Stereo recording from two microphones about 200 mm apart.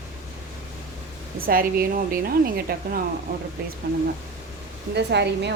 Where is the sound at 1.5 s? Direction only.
45° right (ahead or behind).